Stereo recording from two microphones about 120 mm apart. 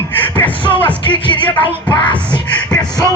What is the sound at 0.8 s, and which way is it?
Music, 40° left (ahead or behind).